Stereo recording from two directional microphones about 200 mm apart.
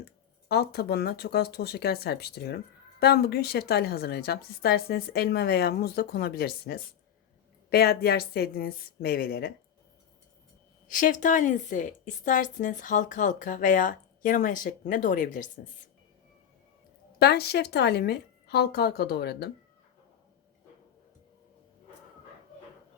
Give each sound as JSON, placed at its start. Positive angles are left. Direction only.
{"t": 0.0, "sound": "a woman's voice", "side_deg": 55}
{"t": 10.8, "sound": "a woman's voice", "side_deg": 40}
{"t": 17.2, "sound": "a woman's voice", "side_deg": 55}